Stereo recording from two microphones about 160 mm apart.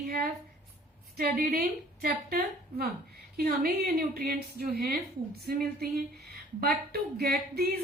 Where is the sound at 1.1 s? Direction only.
70° right (ahead or behind).